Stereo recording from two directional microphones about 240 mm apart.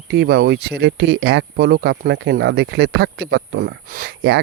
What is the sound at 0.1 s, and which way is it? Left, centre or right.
Speech, right.